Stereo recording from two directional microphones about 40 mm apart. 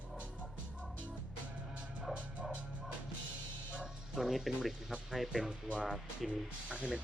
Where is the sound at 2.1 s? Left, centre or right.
Right.